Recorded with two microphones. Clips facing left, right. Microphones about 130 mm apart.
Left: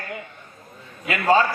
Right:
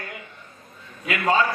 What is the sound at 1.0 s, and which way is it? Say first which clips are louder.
Speech: left 3 dB; 35° left (ahead or behind).